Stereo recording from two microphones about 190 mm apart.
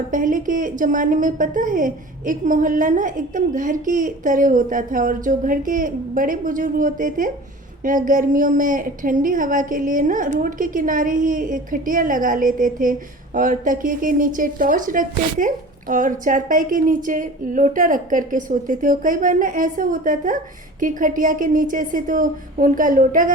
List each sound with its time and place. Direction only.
0.1 s a woman's voice: 45° right (ahead or behind)